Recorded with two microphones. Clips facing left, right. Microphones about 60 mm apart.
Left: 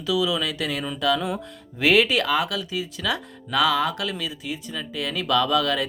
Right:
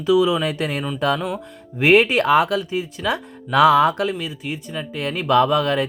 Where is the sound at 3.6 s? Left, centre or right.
Right.